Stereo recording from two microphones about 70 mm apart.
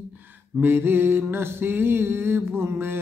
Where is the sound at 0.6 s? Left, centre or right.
Right.